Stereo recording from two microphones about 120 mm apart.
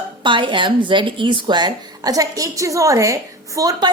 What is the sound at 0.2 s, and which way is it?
A woman's voice, 45° right (ahead or behind).